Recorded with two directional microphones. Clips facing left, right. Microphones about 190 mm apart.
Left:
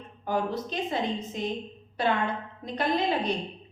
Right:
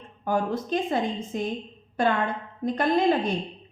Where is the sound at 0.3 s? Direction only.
50° right (ahead or behind).